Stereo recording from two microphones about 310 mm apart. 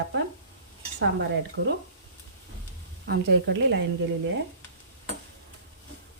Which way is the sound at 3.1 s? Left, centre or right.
Right.